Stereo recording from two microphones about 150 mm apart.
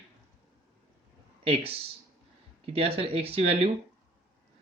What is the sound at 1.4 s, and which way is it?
Speech, 40° right (ahead or behind).